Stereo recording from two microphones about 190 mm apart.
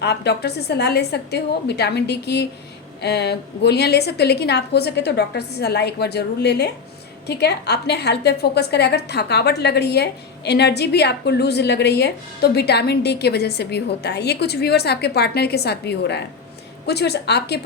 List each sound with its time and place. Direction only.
0.0 s a woman's voice: 60° left (ahead or behind)